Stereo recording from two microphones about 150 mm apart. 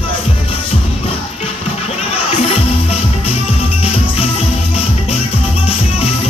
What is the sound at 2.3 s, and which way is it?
Music, 40° left (ahead or behind).